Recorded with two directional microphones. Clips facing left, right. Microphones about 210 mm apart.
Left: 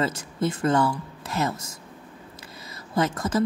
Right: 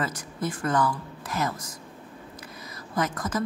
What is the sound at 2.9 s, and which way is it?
Speech, 25° left (ahead or behind).